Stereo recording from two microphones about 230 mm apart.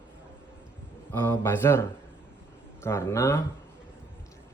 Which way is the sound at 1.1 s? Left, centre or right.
Centre.